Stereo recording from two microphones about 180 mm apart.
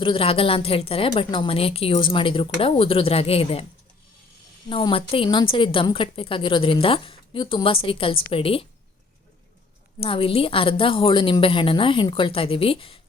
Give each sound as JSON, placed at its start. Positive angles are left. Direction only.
{"t": 0.0, "sound": "a woman's voice", "side_deg": 30}
{"t": 4.7, "sound": "a woman's voice", "side_deg": 30}
{"t": 10.0, "sound": "a woman's voice", "side_deg": 30}